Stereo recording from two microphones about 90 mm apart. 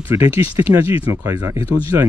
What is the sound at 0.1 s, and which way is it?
Speech, 35° right (ahead or behind).